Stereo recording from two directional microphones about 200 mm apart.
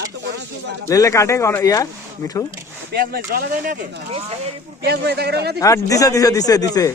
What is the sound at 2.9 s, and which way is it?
Speech, 50° right (ahead or behind).